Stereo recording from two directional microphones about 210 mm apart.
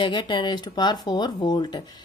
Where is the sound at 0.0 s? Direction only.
20° left (ahead or behind).